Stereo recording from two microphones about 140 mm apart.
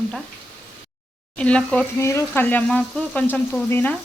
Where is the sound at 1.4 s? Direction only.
5° left (ahead or behind).